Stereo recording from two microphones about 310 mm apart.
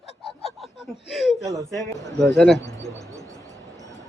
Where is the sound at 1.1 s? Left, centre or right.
Centre.